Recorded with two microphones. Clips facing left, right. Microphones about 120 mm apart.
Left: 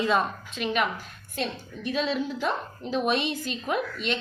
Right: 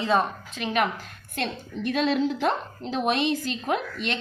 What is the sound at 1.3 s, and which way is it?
A woman's voice, 55° right (ahead or behind).